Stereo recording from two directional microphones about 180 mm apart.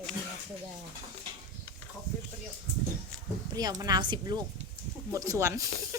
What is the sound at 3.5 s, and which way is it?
A woman's voice, 20° right (ahead or behind).